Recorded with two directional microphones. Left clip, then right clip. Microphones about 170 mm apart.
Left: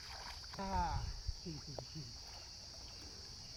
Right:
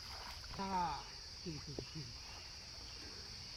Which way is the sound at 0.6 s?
20° left (ahead or behind).